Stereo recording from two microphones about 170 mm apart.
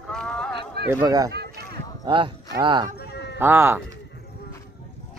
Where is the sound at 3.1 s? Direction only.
80° left.